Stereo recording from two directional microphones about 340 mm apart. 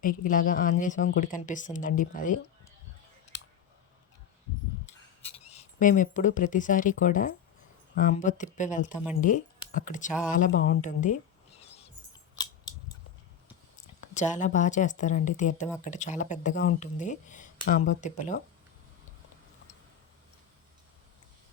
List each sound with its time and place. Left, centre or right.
0.0 s speech: left
5.5 s speech: left
10.1 s speech: centre
10.3 s speech: left
14.1 s speech: left